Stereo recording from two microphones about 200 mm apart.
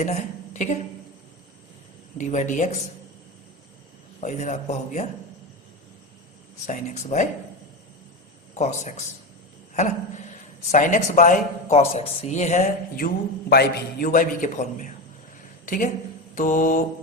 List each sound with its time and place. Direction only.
0.0 s a woman's voice: 35° left (ahead or behind)
2.1 s speech: 40° left (ahead or behind)
4.2 s speech: 35° left (ahead or behind)
6.7 s speech: 35° left (ahead or behind)
8.5 s speech: 35° left (ahead or behind)
13.5 s a woman's voice: 50° left (ahead or behind)